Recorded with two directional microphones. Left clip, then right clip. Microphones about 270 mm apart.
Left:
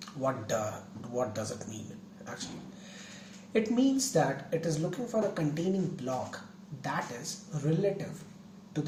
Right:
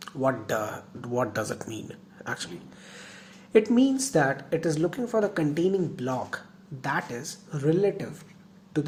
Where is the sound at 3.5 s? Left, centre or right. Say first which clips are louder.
Right 7 dB; right.